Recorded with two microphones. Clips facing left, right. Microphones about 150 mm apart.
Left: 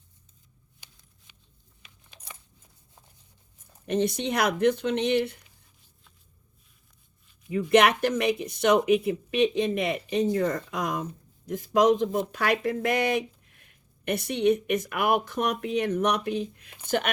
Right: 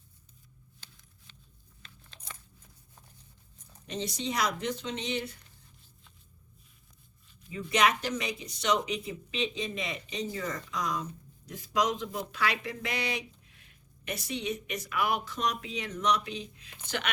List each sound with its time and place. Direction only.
0.8 s a sound: 15° left (ahead or behind)
1.8 s crunch: 10° left (ahead or behind)
3.8 s speech: 55° left (ahead or behind)
7.5 s speech: 55° left (ahead or behind)